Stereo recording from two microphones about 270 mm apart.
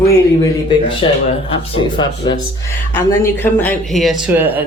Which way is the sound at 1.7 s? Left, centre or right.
Centre.